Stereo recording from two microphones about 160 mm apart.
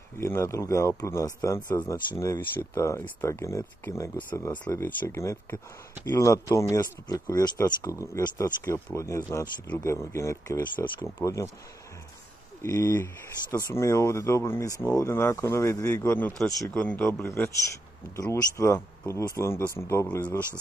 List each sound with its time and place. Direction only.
0.2 s speech: 15° left (ahead or behind)
4.5 s speech: 25° left (ahead or behind)
12.6 s speech: 20° left (ahead or behind)